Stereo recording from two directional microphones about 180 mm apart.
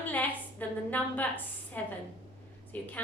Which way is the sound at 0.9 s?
10° left (ahead or behind).